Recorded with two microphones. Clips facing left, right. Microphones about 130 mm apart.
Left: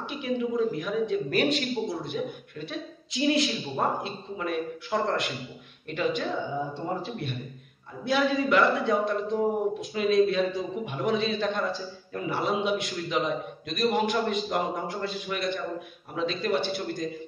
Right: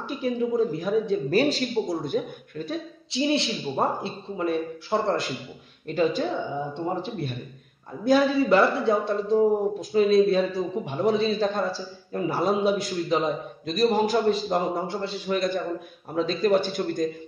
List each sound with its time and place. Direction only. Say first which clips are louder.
0.0 s speech: right 3 dB; 35° right (ahead or behind)
3.1 s speech: right 1 dB; 30° right (ahead or behind)
8.0 s a man's voice: right 5 dB; 40° right (ahead or behind)